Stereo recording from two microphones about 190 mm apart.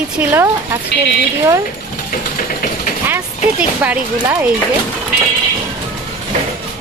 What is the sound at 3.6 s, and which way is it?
Speech, 5° right (ahead or behind).